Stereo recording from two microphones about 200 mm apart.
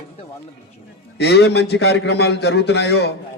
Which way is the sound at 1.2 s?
60° left (ahead or behind).